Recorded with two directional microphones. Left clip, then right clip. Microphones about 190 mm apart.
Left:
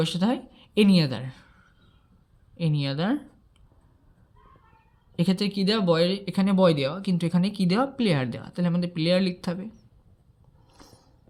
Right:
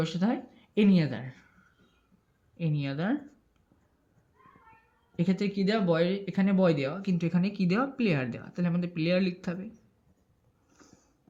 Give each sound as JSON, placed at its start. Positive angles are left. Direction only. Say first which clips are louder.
{"t": 0.0, "sound": "a woman's voice", "louder": "left 4 dB", "side_deg": 30}
{"t": 2.6, "sound": "a woman's voice", "louder": "left 5 dB", "side_deg": 35}
{"t": 5.1, "sound": "speech", "louder": "left 4 dB", "side_deg": 30}